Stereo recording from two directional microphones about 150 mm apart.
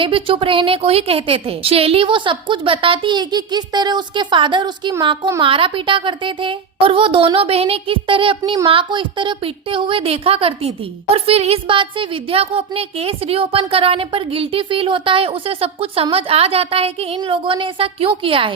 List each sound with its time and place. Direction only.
0.0 s a woman's voice: 35° right (ahead or behind)